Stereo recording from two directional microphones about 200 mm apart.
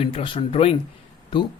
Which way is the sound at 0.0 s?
25° left (ahead or behind).